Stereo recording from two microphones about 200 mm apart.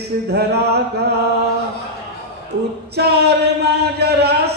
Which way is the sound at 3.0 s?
55° right (ahead or behind).